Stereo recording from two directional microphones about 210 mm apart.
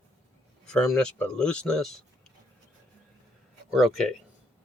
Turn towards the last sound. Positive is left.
turn(degrees=0)  # may be behind; listen again after turning